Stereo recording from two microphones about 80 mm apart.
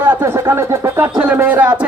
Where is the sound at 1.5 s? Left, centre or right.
Centre.